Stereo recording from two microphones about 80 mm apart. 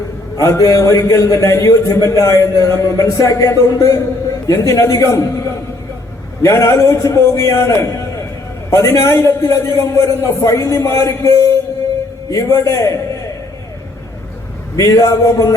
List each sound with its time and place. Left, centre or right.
0.3 s a man's voice: left
6.4 s a man's voice: left
14.8 s a man's voice: left